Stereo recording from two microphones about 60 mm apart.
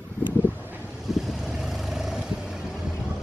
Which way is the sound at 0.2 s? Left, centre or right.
Right.